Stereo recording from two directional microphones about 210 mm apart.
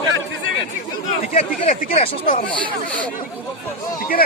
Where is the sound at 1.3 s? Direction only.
30° left (ahead or behind).